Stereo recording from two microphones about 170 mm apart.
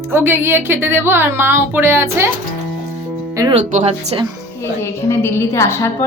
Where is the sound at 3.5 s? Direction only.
45° right (ahead or behind).